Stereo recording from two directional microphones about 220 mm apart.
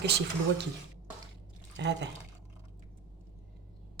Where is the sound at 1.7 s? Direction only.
50° right (ahead or behind).